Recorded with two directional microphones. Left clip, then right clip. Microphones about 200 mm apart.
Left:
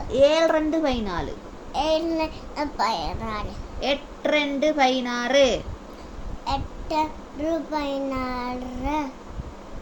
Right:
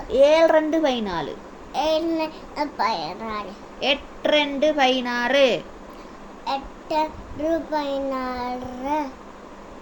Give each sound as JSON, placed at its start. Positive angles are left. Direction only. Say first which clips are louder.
{"t": 0.1, "sound": "a woman's voice", "louder": "right 3 dB", "side_deg": -10}
{"t": 1.7, "sound": "a child's voice", "louder": "right 1 dB", "side_deg": 0}
{"t": 3.8, "sound": "a woman's voice", "louder": "right 3 dB", "side_deg": -10}
{"t": 6.4, "sound": "a child's voice", "louder": "right 1 dB", "side_deg": 5}